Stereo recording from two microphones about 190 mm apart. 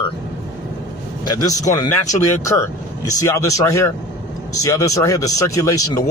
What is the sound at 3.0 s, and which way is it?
Speech, 15° left (ahead or behind).